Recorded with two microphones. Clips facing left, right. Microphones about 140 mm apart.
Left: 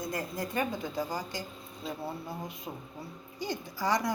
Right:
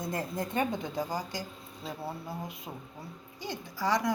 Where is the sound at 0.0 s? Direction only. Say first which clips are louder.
Right 1 dB; 25° right (ahead or behind); by 2.3 s 5° right (ahead or behind).